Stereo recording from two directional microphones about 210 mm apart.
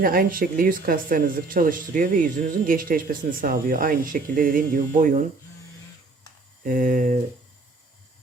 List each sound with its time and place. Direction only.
0.0 s speech: 45° right (ahead or behind)
6.7 s speech: 40° right (ahead or behind)